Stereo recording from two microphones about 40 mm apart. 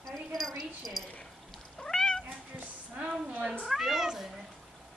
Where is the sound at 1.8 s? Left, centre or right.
Centre.